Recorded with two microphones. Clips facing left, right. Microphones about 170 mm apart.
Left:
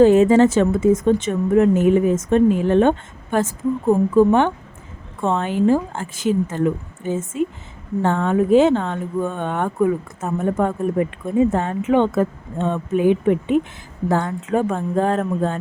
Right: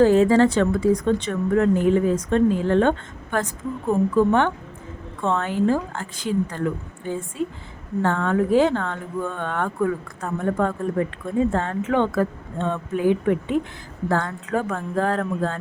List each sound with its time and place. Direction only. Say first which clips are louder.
0.0 s a woman's voice: left 3 dB; 20° left (ahead or behind)